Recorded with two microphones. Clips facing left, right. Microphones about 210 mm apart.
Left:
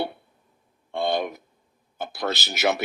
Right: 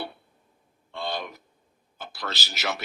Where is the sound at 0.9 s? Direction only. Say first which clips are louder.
Left 8 dB; 55° left (ahead or behind).